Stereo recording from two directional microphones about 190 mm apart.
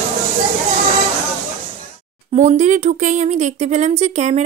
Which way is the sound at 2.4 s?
40° right (ahead or behind).